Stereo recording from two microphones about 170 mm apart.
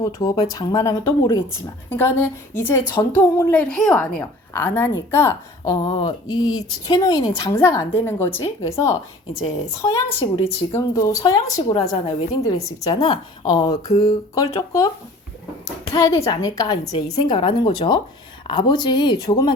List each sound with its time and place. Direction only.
0.0 s a woman's voice: 20° left (ahead or behind)
5.7 s speech: 25° left (ahead or behind)
10.2 s a woman's voice: 35° left (ahead or behind)
10.8 s a woman's voice: 20° left (ahead or behind)